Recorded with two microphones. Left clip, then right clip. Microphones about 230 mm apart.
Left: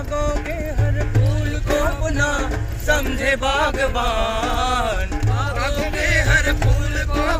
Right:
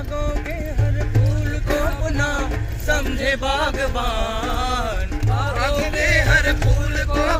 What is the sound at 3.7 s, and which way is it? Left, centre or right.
Chant, left.